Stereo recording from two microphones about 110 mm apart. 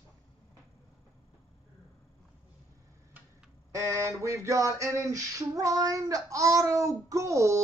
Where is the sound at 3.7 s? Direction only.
30° right (ahead or behind).